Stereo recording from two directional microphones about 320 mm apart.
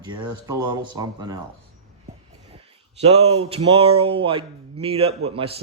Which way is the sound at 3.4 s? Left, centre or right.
Centre.